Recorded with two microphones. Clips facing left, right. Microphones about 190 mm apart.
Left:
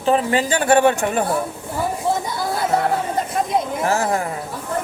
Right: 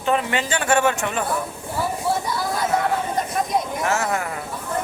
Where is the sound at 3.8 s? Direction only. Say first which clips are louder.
Left 3 dB; 35° left (ahead or behind).